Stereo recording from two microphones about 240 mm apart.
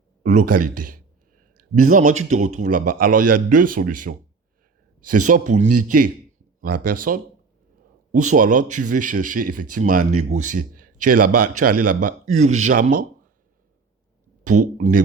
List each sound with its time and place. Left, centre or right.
0.4 s a man's voice: right
1.5 s a sound: right
1.9 s a man's voice: right
5.3 s a man's voice: right
7.1 s a man's voice: right
14.4 s a man's voice: right